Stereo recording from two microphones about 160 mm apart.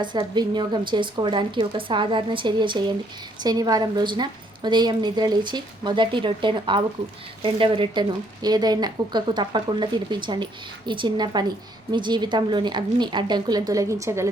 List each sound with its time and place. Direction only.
0.0 s speech: 25° right (ahead or behind)